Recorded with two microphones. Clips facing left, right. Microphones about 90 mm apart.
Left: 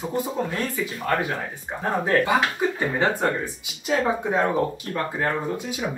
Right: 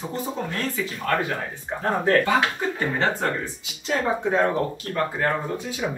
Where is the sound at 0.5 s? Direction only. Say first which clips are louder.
Left 1 dB; 10° left (ahead or behind).